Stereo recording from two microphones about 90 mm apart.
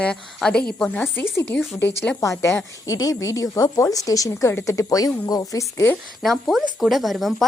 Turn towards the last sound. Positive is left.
turn(degrees=0)  # may be behind; listen again after turning